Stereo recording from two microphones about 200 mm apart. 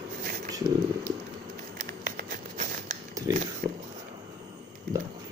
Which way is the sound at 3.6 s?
40° right (ahead or behind).